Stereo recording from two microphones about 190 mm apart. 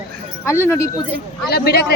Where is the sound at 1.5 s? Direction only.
55° left (ahead or behind).